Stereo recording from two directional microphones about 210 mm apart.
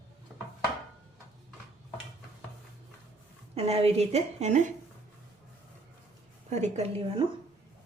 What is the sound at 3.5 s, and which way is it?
A woman's voice, 30° right (ahead or behind).